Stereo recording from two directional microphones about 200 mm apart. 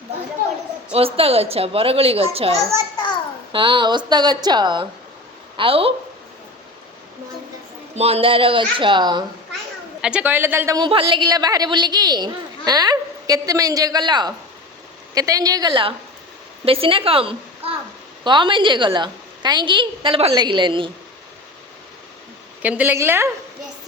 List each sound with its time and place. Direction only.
0.9 s a woman's voice: 30° right (ahead or behind)
7.9 s a woman's voice: 30° right (ahead or behind)
10.0 s a woman's voice: 5° right (ahead or behind); by 20.9 s 25° right (ahead or behind)
22.6 s a woman's voice: 10° right (ahead or behind)